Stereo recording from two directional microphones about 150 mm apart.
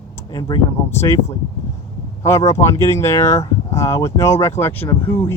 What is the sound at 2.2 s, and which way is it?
Speech, 20° left (ahead or behind).